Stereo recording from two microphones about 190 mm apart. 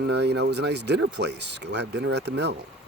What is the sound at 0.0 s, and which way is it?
Speech, 60° right (ahead or behind).